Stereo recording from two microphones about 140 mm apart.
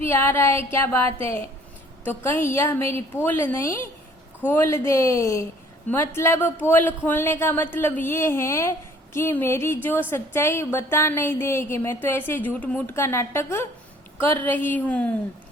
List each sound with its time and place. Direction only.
0.0 s a woman's voice: 15° left (ahead or behind)